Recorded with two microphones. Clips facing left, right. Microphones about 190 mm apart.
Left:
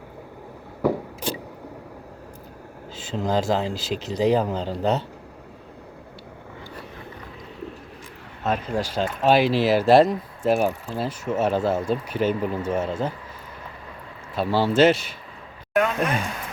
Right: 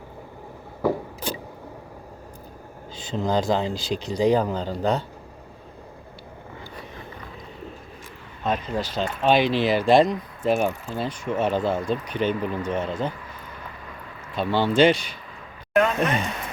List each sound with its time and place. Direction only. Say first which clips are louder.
3.1 s speech: even; 5° left (ahead or behind)
8.4 s speech: left 1 dB; 10° left (ahead or behind)
12.4 s speech: left 1 dB; 35° left (ahead or behind)
12.6 s speech: left 1 dB; 5° left (ahead or behind)
14.3 s speech: left 1 dB; 5° left (ahead or behind)
15.7 s a sound: right 1 dB; centre (ahead or behind)